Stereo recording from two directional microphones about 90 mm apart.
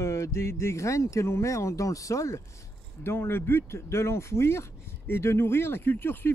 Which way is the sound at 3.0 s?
25° left (ahead or behind).